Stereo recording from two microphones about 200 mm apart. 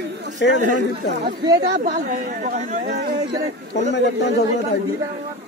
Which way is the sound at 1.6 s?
35° right (ahead or behind).